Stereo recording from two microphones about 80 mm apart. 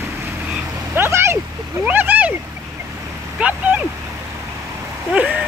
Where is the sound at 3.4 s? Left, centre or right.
Centre.